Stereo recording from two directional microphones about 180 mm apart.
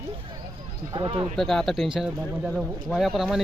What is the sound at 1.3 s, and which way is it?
Speech, centre (ahead or behind).